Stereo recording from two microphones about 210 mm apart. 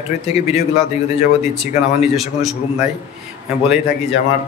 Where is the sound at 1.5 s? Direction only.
Centre (ahead or behind).